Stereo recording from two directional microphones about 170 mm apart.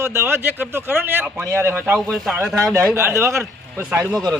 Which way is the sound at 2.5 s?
15° right (ahead or behind).